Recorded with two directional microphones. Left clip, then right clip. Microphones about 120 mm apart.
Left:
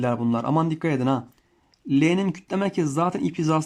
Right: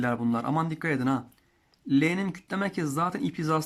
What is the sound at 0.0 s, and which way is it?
Speech, 15° left (ahead or behind).